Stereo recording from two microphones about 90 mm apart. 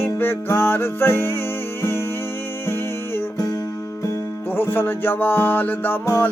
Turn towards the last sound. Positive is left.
turn(degrees=20)  # may be behind; listen again after turning